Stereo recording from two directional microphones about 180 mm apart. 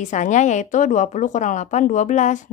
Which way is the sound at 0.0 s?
45° left (ahead or behind).